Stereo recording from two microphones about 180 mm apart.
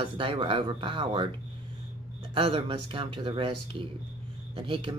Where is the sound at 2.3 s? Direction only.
30° right (ahead or behind).